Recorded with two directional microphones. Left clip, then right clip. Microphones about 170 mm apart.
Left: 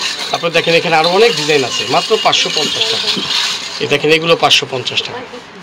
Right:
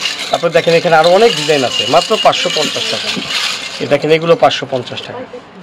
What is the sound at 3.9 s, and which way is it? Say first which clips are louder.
Speech: right 1 dB; 50° right (ahead or behind).